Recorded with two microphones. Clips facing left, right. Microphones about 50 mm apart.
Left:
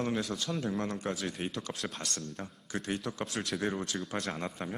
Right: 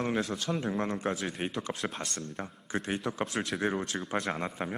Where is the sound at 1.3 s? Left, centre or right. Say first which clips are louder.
Right 3 dB; right.